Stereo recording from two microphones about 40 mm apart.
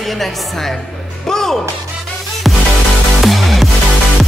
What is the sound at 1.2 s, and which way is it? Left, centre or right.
Music, centre.